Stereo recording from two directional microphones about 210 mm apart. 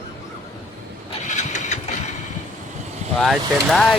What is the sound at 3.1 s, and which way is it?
Speech, centre (ahead or behind).